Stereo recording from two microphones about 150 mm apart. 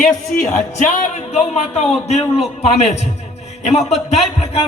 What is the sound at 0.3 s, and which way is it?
A man's voice, 55° left (ahead or behind).